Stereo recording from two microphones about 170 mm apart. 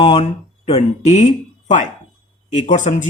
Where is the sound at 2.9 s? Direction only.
40° left (ahead or behind).